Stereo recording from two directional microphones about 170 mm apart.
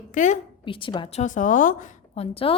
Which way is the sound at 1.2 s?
50° left (ahead or behind).